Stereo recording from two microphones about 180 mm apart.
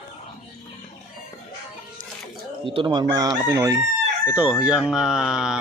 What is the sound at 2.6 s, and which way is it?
Chicken, 25° right (ahead or behind).